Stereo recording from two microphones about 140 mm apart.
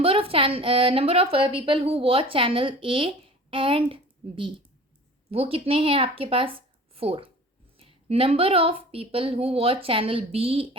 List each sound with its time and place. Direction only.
0.0 s a woman's voice: 45° right (ahead or behind)